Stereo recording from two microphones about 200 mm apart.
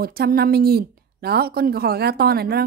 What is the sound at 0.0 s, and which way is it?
A woman's voice, 50° right (ahead or behind).